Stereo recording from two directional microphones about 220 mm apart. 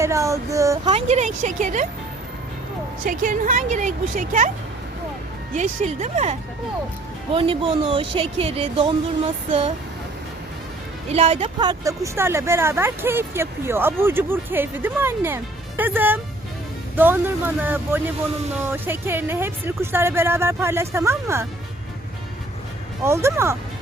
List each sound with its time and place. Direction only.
0.0 s speech: 15° right (ahead or behind)
0.9 s speech: 30° right (ahead or behind)
3.0 s speech: 35° right (ahead or behind)
5.5 s speech: 30° right (ahead or behind)
7.3 s speech: 25° right (ahead or behind)
11.1 s speech: 30° right (ahead or behind); by 21.4 s 15° right (ahead or behind)
23.0 s speech: 10° right (ahead or behind)